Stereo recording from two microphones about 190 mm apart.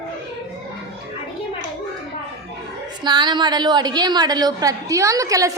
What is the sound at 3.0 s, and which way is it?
A man's voice, 25° right (ahead or behind).